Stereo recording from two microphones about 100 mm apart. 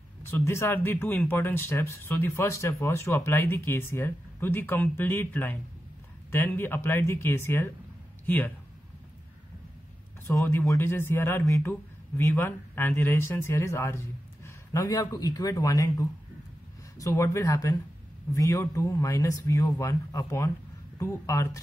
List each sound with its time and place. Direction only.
0.2 s speech: 25° left (ahead or behind)
10.4 s speech: 20° left (ahead or behind)